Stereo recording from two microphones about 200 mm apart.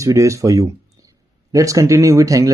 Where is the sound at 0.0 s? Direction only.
15° right (ahead or behind).